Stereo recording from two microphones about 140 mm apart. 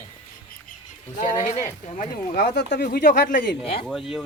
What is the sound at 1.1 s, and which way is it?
Speech, 55° left (ahead or behind).